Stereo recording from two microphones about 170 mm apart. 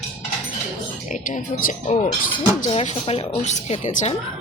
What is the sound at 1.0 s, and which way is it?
Speech, 45° left (ahead or behind).